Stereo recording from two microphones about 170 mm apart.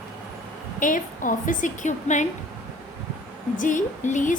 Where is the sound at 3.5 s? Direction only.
50° left (ahead or behind).